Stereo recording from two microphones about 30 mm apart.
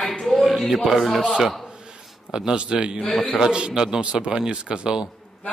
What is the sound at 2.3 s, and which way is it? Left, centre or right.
Speech, right.